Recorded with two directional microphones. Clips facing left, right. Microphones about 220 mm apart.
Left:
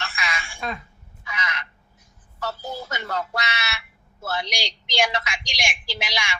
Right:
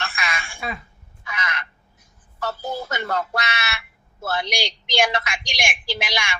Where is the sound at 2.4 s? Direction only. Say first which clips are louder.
Right 3 dB; 55° right (ahead or behind).